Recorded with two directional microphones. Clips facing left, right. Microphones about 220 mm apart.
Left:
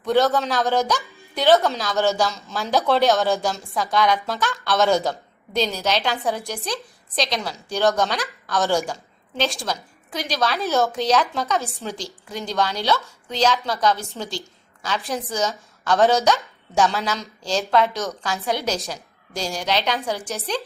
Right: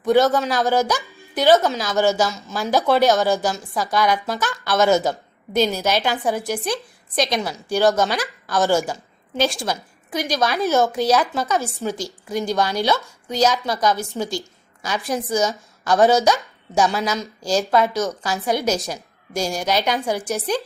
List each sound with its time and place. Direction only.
0.0 s a woman's voice: 10° right (ahead or behind)